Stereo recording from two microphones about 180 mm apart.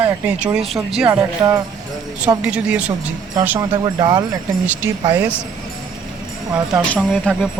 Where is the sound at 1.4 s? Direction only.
20° right (ahead or behind).